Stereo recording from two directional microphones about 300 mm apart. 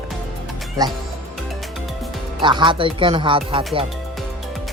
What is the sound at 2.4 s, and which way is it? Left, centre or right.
Speech, centre.